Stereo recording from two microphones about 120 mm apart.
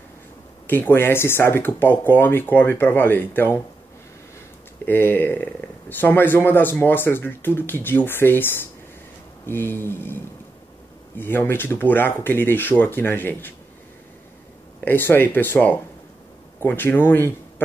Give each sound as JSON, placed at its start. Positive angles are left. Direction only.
{"t": 0.7, "sound": "speech", "side_deg": 15}
{"t": 4.8, "sound": "speech", "side_deg": 15}
{"t": 11.1, "sound": "speech", "side_deg": 15}
{"t": 14.9, "sound": "speech", "side_deg": 20}